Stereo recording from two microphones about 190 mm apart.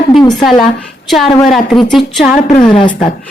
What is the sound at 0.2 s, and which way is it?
Speech, 20° left (ahead or behind).